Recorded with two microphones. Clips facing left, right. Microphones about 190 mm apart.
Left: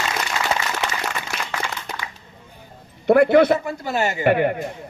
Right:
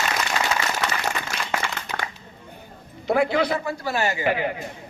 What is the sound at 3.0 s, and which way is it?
Speech, 60° left (ahead or behind).